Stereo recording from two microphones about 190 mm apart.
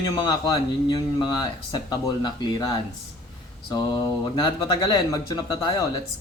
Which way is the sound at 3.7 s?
25° left (ahead or behind).